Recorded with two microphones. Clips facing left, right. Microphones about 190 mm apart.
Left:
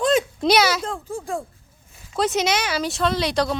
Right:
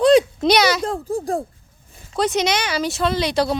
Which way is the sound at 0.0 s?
35° right (ahead or behind).